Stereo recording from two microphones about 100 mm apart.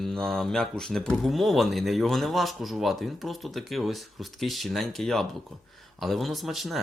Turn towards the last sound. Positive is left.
turn(degrees=0)  # may be behind; listen again after turning